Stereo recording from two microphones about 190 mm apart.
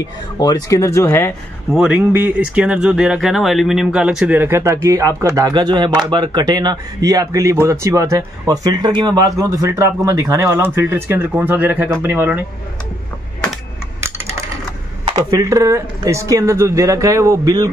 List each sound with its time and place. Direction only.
0.0 s speech: 20° left (ahead or behind)
1.7 s speech: 5° right (ahead or behind)
15.3 s speech: 15° right (ahead or behind)